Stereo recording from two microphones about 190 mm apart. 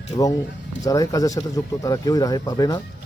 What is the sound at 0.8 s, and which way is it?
Speech, 20° left (ahead or behind).